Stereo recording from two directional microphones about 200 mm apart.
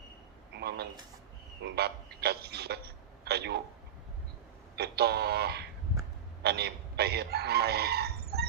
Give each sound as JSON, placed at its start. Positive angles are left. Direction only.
{"t": 0.5, "sound": "a sound", "side_deg": -55}
{"t": 1.6, "sound": "a man's voice", "side_deg": -55}
{"t": 4.8, "sound": "speech", "side_deg": -55}